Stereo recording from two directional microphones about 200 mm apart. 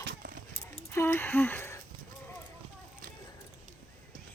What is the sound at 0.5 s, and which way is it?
Keys jangling, 15° left (ahead or behind).